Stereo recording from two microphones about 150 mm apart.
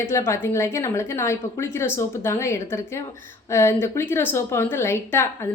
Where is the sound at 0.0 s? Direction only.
20° left (ahead or behind).